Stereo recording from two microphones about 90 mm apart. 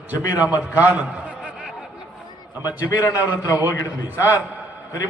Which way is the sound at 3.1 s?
25° right (ahead or behind).